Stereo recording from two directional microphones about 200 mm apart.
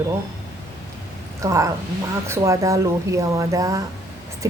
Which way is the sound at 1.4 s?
15° right (ahead or behind).